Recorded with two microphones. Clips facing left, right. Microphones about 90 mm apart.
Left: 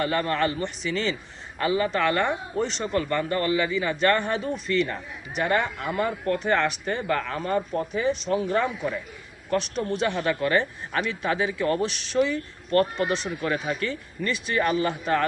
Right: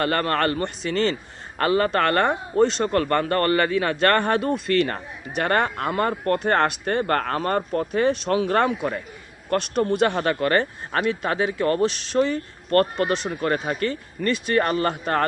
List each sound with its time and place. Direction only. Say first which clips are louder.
0.0 s a man's voice: right 2 dB; 60° right (ahead or behind)